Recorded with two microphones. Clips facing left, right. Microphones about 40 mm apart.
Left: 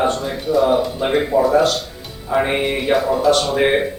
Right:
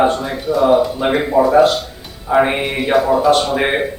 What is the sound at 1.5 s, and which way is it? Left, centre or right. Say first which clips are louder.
Speech: right 4 dB; centre.